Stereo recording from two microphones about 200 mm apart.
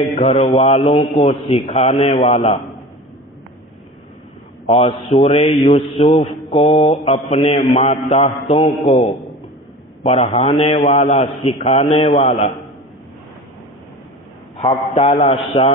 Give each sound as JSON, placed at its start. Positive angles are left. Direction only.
{"t": 0.1, "sound": "speech", "side_deg": 25}
{"t": 4.6, "sound": "speech", "side_deg": 30}
{"t": 14.6, "sound": "speech", "side_deg": 25}